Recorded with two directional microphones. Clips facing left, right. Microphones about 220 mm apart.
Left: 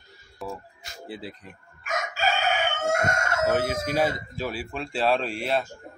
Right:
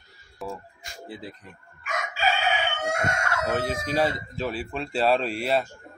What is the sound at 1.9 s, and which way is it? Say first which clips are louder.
Chicken: even; 45° left (ahead or behind).